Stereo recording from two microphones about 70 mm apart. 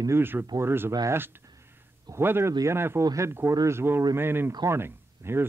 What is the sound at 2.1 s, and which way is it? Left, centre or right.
Speech, right.